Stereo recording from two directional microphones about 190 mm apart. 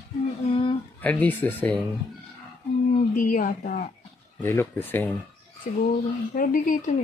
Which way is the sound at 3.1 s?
45° left (ahead or behind).